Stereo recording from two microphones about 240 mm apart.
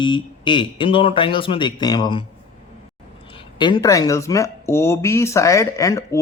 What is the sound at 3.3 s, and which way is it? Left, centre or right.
Speech, centre.